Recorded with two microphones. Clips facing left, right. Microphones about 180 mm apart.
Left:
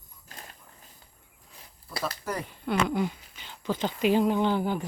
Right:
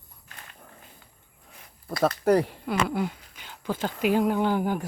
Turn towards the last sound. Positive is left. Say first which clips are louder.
# right 1 dB
turn(degrees=-10)  # may be behind; listen again after turning